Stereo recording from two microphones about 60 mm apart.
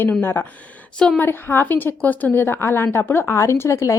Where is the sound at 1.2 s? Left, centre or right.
Left.